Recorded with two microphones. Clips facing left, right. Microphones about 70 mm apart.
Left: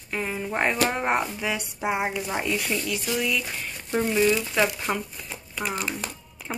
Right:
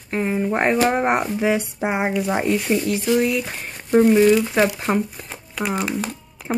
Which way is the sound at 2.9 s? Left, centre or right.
Right.